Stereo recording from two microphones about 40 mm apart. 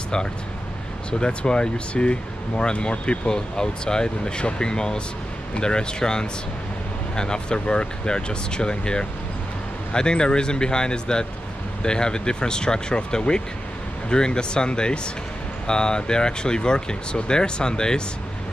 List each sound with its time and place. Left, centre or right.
1.2 s speech: left